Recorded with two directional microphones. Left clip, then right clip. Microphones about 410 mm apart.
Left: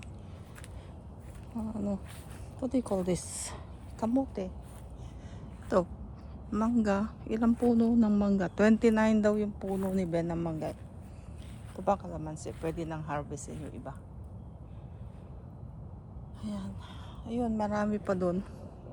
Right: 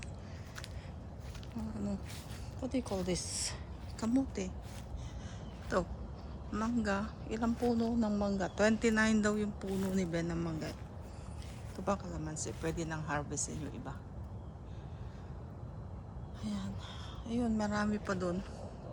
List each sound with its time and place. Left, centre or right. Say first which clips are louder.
1.5 s speech: left 6 dB; centre
4.0 s speech: left 4 dB; centre
5.7 s speech: left 6 dB; centre
11.9 s speech: left 6 dB; centre
16.4 s speech: left 1 dB; centre